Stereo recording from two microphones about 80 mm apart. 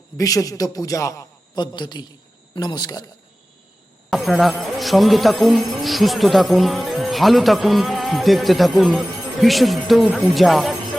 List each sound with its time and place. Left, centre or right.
0.2 s a man's voice: left
1.5 s a man's voice: left
4.1 s speech: centre